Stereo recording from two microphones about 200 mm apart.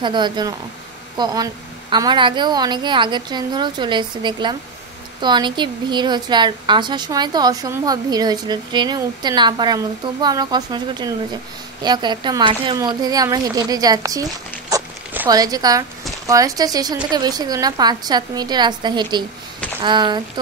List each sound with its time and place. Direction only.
0.0 s a woman's voice: 20° right (ahead or behind)
14.7 s zipper: 20° right (ahead or behind)
16.3 s a woman's voice: 15° right (ahead or behind)